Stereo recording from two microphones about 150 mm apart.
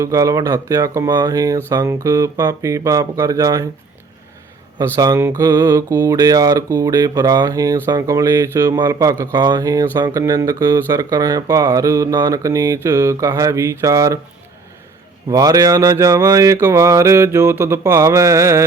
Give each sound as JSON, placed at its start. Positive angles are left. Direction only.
{"t": 0.0, "sound": "speech", "side_deg": -20}
{"t": 4.9, "sound": "speech", "side_deg": -25}
{"t": 15.3, "sound": "speech", "side_deg": -25}